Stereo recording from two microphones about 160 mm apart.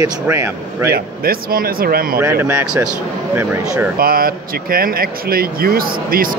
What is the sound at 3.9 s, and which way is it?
Speech, 65° right (ahead or behind).